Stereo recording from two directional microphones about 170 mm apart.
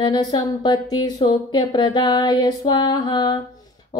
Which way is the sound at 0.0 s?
25° left (ahead or behind).